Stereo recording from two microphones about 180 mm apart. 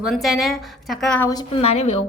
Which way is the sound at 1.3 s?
25° left (ahead or behind).